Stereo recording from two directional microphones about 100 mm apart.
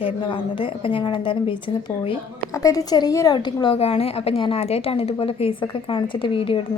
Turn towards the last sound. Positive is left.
turn(degrees=65)  # may be behind; listen again after turning